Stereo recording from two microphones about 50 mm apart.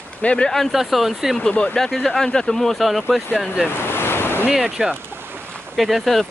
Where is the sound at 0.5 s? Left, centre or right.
Centre.